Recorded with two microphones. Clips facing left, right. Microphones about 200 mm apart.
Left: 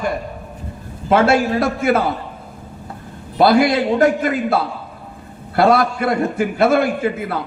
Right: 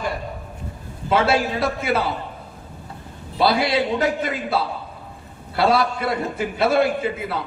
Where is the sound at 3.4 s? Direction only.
50° left (ahead or behind).